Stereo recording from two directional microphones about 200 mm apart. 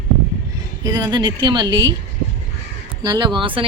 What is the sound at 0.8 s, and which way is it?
Speech, 20° right (ahead or behind).